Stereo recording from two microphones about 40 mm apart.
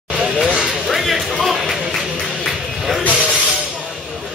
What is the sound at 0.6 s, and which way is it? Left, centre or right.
Music, centre.